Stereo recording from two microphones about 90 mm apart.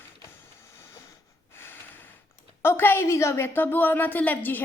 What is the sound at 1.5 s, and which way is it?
Snort, 25° left (ahead or behind).